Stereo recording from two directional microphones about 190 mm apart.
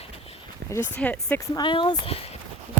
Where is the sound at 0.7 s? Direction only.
10° left (ahead or behind).